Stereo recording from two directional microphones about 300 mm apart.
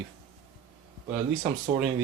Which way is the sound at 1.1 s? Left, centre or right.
Centre.